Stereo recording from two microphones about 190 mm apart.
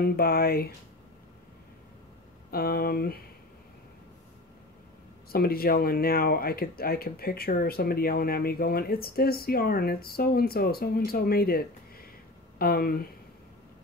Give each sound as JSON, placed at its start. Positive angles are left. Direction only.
{"t": 0.0, "sound": "speech", "side_deg": 50}
{"t": 2.5, "sound": "speech", "side_deg": 55}
{"t": 5.3, "sound": "speech", "side_deg": 50}